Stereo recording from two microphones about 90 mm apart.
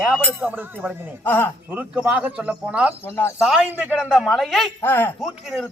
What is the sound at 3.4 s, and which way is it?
A man's voice, 5° right (ahead or behind).